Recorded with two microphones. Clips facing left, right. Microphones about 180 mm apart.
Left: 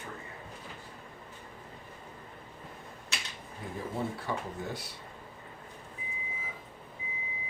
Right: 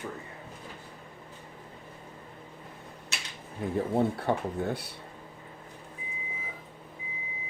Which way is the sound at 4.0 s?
60° right (ahead or behind).